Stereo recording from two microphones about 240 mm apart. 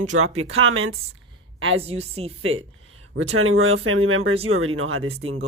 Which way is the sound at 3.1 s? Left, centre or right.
Right.